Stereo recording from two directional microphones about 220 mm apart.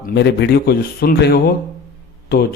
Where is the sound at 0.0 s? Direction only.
50° left (ahead or behind).